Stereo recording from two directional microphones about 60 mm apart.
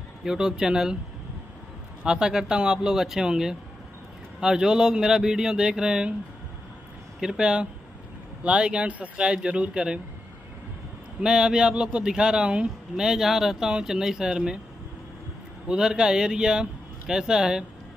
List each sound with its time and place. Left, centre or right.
0.2 s speech: centre
2.0 s speech: centre
7.2 s speech: centre
11.1 s speech: centre
13.0 s speech: centre
15.7 s speech: centre